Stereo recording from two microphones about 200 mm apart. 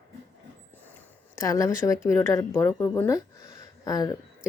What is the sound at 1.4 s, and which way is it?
Speech, 15° left (ahead or behind).